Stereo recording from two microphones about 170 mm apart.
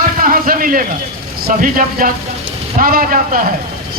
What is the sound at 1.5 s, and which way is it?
A man's voice, 55° right (ahead or behind).